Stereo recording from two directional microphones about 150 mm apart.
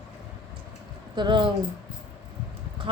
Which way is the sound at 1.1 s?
30° right (ahead or behind).